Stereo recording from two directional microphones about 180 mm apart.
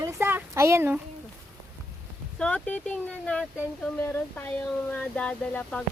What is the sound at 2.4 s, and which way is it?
Speech, 5° left (ahead or behind).